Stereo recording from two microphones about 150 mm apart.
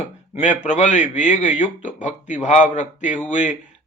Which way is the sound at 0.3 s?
55° left (ahead or behind).